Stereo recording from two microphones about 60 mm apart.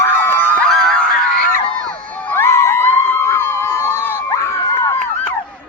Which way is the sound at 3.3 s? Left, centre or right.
Left.